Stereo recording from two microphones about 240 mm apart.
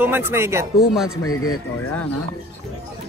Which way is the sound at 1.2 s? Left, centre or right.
Left.